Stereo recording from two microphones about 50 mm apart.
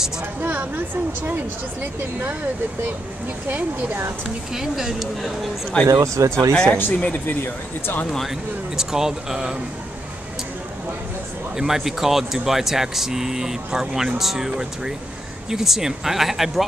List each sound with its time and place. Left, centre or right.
0.4 s speech: right
1.8 s speech: right
3.4 s speech: right
4.6 s speech: centre
5.7 s speech: left
6.2 s speech: right
6.5 s speech: centre
6.9 s speech: left
8.7 s speech: centre
11.5 s speech: centre